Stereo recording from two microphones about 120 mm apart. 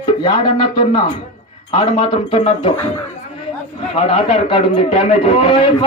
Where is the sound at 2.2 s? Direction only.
55° left (ahead or behind).